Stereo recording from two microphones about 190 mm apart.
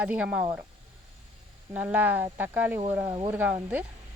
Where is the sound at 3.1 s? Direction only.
25° right (ahead or behind).